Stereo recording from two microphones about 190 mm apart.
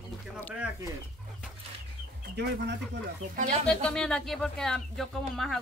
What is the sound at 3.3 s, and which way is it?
Speech, 40° right (ahead or behind).